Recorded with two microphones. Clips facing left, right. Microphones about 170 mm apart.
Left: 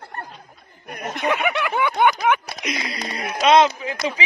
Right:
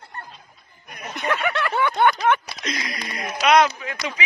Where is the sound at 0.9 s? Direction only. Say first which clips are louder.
Left 5 dB; 55° left (ahead or behind).